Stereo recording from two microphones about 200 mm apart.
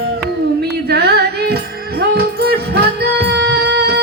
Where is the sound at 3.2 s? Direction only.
55° right (ahead or behind).